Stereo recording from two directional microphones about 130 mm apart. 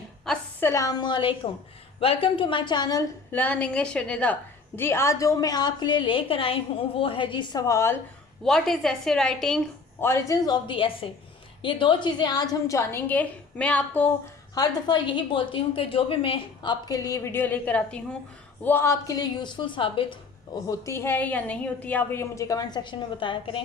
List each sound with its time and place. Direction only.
0.3 s a sound: 5° left (ahead or behind)
0.6 s a woman's voice: 25° left (ahead or behind)
3.3 s a woman's voice: 10° left (ahead or behind)
4.8 s a woman's voice: 20° left (ahead or behind); by 7.6 s 40° left (ahead or behind)
7.7 s a woman's voice: 20° left (ahead or behind)
8.4 s a woman's voice: 5° left (ahead or behind)
10.0 s a woman's voice: 20° left (ahead or behind)
14.5 s a woman's voice: 30° left (ahead or behind)
16.9 s a woman's voice: 25° left (ahead or behind)
20.7 s a woman's voice: 20° left (ahead or behind); by 23.6 s 40° left (ahead or behind)